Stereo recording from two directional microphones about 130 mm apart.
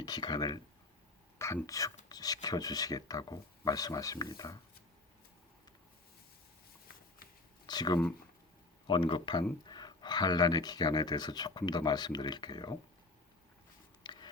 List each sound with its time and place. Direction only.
0.0 s speech: 35° left (ahead or behind)
1.6 s speech: 25° left (ahead or behind)
7.7 s speech: 35° left (ahead or behind)
14.0 s a sound: 35° left (ahead or behind)